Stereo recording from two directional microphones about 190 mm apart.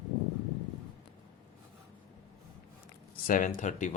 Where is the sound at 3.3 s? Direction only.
45° left (ahead or behind).